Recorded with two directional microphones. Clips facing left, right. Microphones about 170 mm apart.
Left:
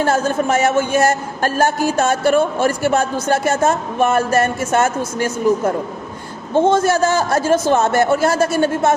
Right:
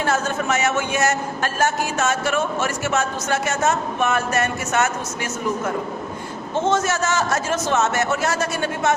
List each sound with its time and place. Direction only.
0.1 s a man's voice: 30° left (ahead or behind)
4.4 s speech: 50° left (ahead or behind)
4.7 s a man's voice: 30° left (ahead or behind)